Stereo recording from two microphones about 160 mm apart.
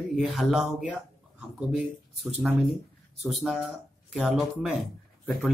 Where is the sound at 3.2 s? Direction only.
Centre (ahead or behind).